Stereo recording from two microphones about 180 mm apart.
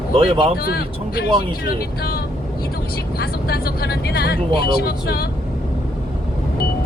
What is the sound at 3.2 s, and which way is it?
Speech, 60° left (ahead or behind).